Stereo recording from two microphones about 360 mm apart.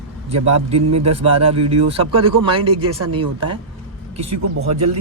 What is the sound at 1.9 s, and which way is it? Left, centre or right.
Speech, centre.